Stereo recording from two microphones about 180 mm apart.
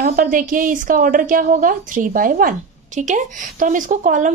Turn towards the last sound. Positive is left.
turn(degrees=-45)  # may be behind; listen again after turning